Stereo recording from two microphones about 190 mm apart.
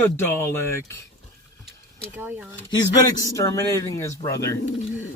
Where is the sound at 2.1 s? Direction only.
10° right (ahead or behind).